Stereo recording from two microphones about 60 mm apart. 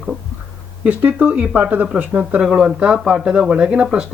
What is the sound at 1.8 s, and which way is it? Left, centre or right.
Speech, centre.